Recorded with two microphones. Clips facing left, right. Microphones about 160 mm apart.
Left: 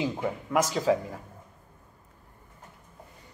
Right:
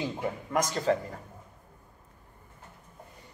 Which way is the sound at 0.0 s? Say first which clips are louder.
Left 3 dB; 5° left (ahead or behind).